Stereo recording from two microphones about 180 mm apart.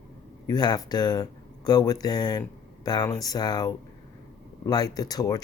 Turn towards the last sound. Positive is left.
turn(degrees=20)  # may be behind; listen again after turning